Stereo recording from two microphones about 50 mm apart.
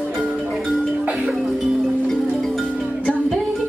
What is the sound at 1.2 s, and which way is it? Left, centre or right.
Music, centre.